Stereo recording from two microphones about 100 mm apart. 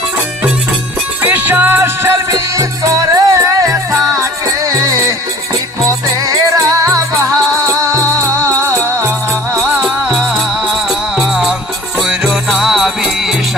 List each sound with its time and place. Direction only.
1.2 s music: 15° right (ahead or behind)
2.3 s music: 35° right (ahead or behind)
6.2 s music: 35° right (ahead or behind)
9.8 s music: 5° right (ahead or behind)